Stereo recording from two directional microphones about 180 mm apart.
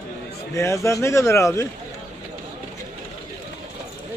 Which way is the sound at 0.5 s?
15° left (ahead or behind).